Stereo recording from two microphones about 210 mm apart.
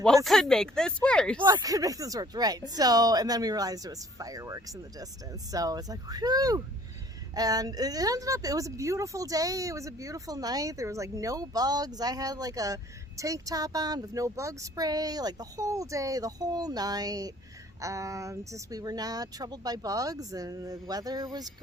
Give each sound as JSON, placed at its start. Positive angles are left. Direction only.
{"t": 0.3, "sound": "speech", "side_deg": 0}
{"t": 1.4, "sound": "speech", "side_deg": -20}